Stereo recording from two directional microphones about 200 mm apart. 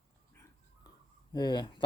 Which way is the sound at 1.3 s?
20° left (ahead or behind).